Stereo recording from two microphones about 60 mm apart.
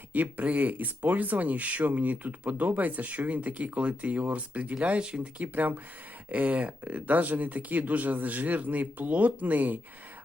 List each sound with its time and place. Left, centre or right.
0.1 s speech: right